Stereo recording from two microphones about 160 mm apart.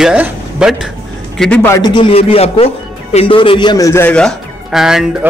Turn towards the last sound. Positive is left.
turn(degrees=-5)  # may be behind; listen again after turning